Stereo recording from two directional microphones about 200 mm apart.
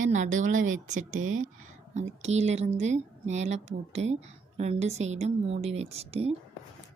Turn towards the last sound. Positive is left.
turn(degrees=-30)  # may be behind; listen again after turning